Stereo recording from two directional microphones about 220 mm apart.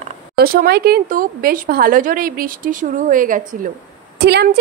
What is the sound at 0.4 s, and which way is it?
Speech, 40° right (ahead or behind).